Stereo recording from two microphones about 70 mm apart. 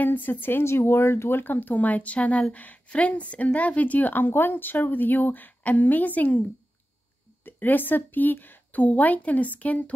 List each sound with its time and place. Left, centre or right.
0.0 s a woman's voice: left
7.4 s a woman's voice: left